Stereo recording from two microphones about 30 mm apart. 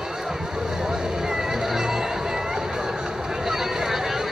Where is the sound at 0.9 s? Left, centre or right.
Centre.